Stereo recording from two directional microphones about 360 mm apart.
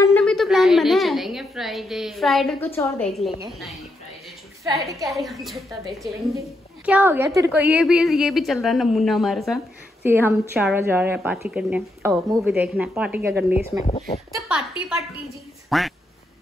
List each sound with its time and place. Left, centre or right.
0.0 s a sound: centre
4.6 s a woman's voice: centre
13.8 s speech: centre
14.3 s a woman's voice: centre